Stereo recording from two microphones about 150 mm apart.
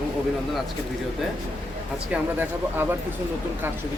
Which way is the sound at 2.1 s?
15° right (ahead or behind).